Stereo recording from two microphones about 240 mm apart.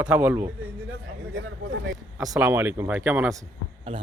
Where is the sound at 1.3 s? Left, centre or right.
Right.